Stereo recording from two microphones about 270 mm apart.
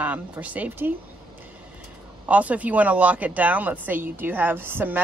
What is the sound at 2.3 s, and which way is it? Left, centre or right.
Speech, centre.